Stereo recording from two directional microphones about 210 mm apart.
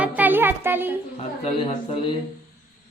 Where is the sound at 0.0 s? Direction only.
10° right (ahead or behind).